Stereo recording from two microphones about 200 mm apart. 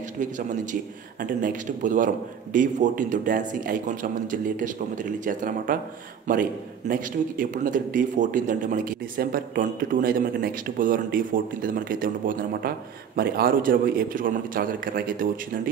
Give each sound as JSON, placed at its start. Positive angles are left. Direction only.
{"t": 1.2, "sound": "a man's voice", "side_deg": -40}
{"t": 6.9, "sound": "speech", "side_deg": -45}